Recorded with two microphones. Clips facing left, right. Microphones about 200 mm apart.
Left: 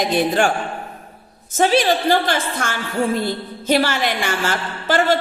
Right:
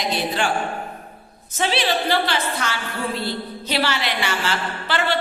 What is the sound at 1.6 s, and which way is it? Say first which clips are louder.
A woman's voice: left 6 dB; 45° left (ahead or behind).